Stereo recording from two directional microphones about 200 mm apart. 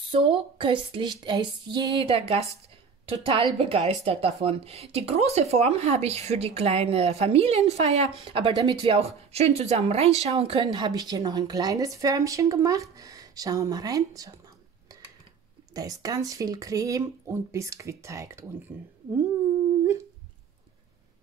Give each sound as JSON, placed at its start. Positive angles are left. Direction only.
{"t": 0.1, "sound": "a sound", "side_deg": -25}
{"t": 3.1, "sound": "a woman's voice", "side_deg": -25}
{"t": 15.7, "sound": "a woman's voice", "side_deg": -15}